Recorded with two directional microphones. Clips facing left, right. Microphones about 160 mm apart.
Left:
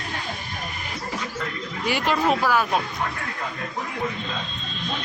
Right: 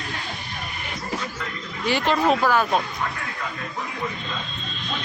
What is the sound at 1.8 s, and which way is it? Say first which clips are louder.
Speech: right 2 dB; 10° left (ahead or behind).